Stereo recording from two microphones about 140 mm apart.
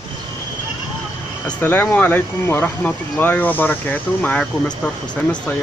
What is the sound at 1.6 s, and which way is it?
Speech, 15° left (ahead or behind).